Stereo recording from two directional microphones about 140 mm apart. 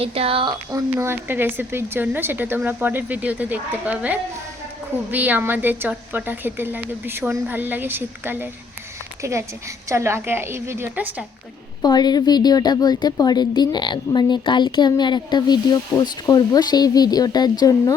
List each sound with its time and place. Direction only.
0.0 s speech: 45° right (ahead or behind)
0.9 s a woman's voice: 15° right (ahead or behind)
11.8 s speech: 30° left (ahead or behind)